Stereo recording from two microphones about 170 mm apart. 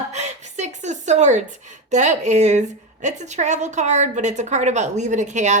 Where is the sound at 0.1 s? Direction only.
40° right (ahead or behind).